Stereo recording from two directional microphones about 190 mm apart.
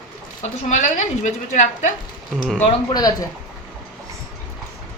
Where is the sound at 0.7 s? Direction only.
40° left (ahead or behind).